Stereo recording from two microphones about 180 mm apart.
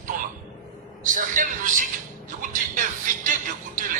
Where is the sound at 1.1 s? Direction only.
45° right (ahead or behind).